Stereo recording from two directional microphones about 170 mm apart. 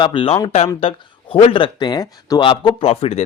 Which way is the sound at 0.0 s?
30° left (ahead or behind).